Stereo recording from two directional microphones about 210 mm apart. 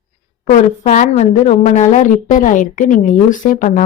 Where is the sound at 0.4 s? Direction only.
35° left (ahead or behind).